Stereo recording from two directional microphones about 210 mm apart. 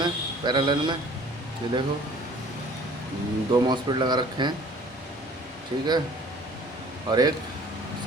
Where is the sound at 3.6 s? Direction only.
20° right (ahead or behind).